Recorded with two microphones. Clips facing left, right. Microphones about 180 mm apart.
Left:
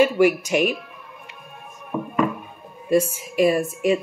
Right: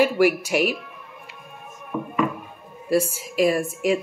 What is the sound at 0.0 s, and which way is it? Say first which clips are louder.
Speech: left 2 dB; 10° right (ahead or behind).